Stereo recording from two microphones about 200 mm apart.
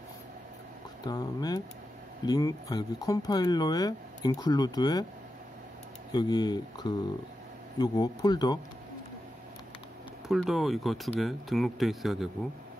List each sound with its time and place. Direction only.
1.0 s speech: 20° left (ahead or behind)
6.1 s speech: 20° left (ahead or behind)
10.2 s speech: centre (ahead or behind)